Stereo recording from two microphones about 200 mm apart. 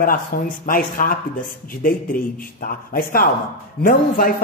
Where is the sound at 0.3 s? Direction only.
45° left (ahead or behind).